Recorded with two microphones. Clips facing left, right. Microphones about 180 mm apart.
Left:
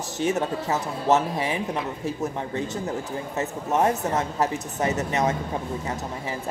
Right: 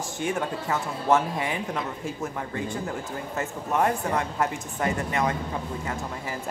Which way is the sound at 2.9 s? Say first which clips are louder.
Left 3 dB; 20° left (ahead or behind).